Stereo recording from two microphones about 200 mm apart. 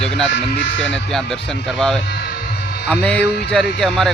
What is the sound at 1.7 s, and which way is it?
Speech, centre (ahead or behind).